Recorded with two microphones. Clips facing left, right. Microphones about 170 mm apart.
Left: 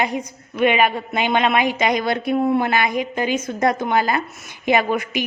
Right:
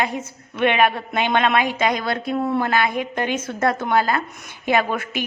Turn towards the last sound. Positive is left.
turn(degrees=15)  # may be behind; listen again after turning